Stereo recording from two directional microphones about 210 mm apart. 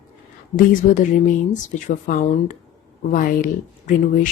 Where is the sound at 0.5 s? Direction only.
40° left (ahead or behind).